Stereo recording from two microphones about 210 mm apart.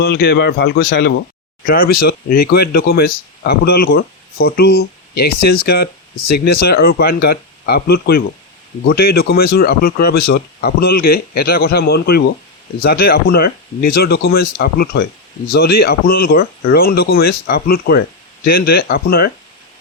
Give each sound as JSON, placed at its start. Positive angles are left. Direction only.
{"t": 0.0, "sound": "speech", "side_deg": 50}